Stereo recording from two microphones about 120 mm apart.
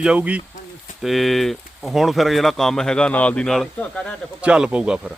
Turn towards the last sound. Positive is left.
turn(degrees=-10)  # may be behind; listen again after turning